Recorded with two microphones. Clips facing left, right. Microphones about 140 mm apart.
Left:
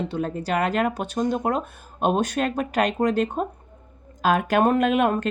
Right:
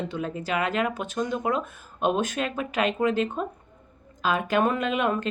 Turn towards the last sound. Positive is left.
turn(degrees=45)  # may be behind; listen again after turning